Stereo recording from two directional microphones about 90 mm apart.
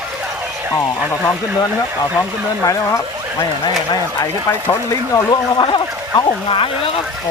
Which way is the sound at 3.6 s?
50° left (ahead or behind).